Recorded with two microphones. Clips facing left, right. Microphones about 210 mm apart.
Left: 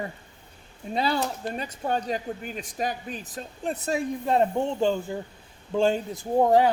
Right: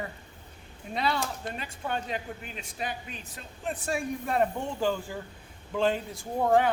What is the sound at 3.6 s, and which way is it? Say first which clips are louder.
Speech: left 4 dB; 30° left (ahead or behind).